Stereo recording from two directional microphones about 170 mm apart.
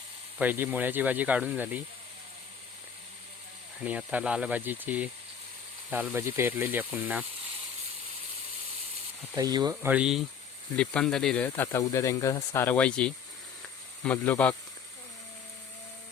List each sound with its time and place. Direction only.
0.3 s speech: 10° right (ahead or behind)
3.8 s speech: 10° right (ahead or behind)
9.3 s speech: 20° right (ahead or behind)
9.9 s speech: 5° right (ahead or behind)